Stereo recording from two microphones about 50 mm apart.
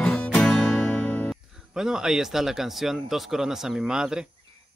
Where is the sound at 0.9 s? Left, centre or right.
Left.